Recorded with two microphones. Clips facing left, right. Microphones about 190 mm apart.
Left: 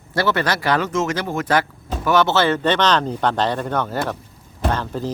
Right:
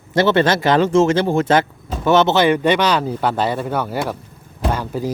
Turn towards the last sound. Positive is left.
turn(degrees=-10)  # may be behind; listen again after turning